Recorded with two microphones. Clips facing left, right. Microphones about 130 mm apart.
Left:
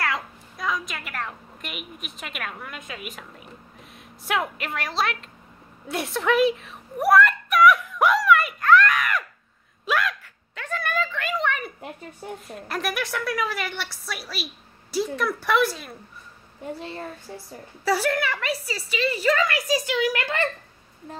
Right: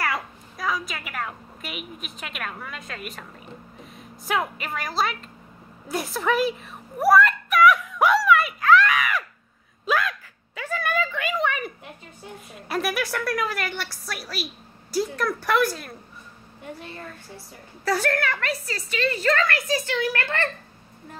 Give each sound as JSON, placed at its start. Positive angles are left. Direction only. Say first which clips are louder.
{"t": 0.1, "sound": "a woman's voice", "louder": "even", "side_deg": 0}
{"t": 4.3, "sound": "a woman's voice", "louder": "even", "side_deg": 0}
{"t": 5.9, "sound": "a sound", "louder": "left 1 dB", "side_deg": 0}
{"t": 12.4, "sound": "a woman's voice", "louder": "right 3 dB", "side_deg": -5}
{"t": 16.6, "sound": "a child's voice", "louder": "left 5 dB", "side_deg": 30}
{"t": 17.8, "sound": "a woman's voice", "louder": "left 1 dB", "side_deg": 5}